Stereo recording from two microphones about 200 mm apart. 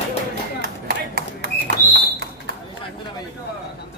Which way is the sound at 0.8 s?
55° right (ahead or behind).